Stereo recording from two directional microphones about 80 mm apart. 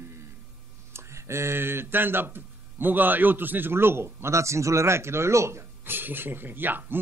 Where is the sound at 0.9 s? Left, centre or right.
Right.